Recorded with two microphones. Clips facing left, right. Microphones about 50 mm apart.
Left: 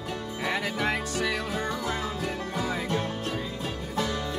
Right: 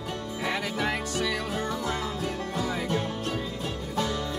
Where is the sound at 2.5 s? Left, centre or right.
Left.